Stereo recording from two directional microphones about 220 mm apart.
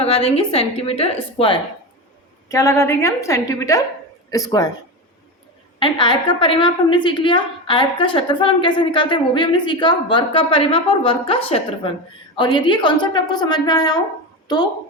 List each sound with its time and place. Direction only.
0.0 s a woman's voice: 25° left (ahead or behind)
2.5 s a woman's voice: 15° left (ahead or behind)
5.8 s a woman's voice: 20° left (ahead or behind)